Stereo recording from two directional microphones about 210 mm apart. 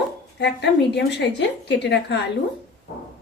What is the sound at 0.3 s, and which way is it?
A woman's voice, 55° left (ahead or behind).